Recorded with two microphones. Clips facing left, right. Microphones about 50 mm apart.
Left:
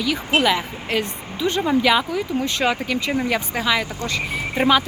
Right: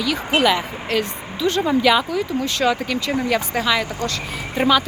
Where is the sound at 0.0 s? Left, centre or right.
Centre.